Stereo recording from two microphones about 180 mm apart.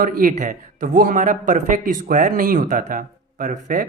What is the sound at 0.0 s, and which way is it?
Speech, 50° right (ahead or behind).